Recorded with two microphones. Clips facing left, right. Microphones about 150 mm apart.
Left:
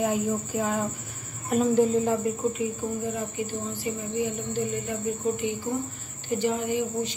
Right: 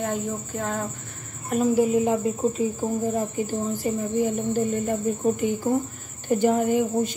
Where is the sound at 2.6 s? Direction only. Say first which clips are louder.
Right 4 dB; 35° right (ahead or behind).